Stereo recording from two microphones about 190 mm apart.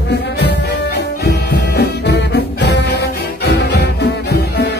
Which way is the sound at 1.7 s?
60° left (ahead or behind).